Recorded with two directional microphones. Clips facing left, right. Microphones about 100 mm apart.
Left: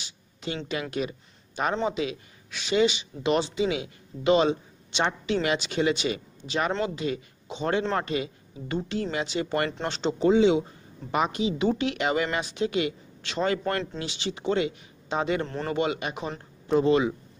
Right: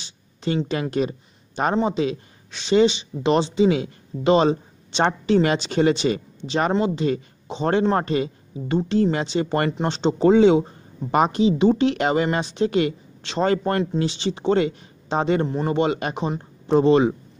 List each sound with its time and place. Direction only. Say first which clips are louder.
0.7 s a woman's voice: right 6 dB; 35° right (ahead or behind)
9.7 s speech: right 6 dB; 20° right (ahead or behind)
10.1 s a woman's voice: right 5 dB; 45° right (ahead or behind)
15.4 s a man's voice: right 7 dB; 15° right (ahead or behind)
15.7 s a woman's voice: right 4 dB; 35° right (ahead or behind)
16.2 s speech: right 7 dB; 25° right (ahead or behind)